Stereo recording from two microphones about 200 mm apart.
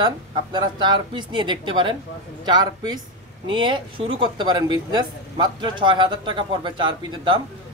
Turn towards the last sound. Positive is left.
turn(degrees=-25)  # may be behind; listen again after turning